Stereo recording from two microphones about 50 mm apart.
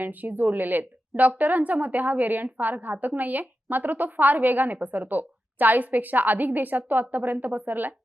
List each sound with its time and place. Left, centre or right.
0.0 s a woman's voice: right